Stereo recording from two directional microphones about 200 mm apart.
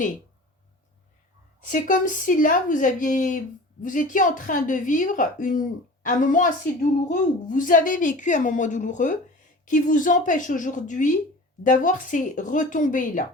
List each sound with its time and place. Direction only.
1.6 s a woman's voice: 40° left (ahead or behind)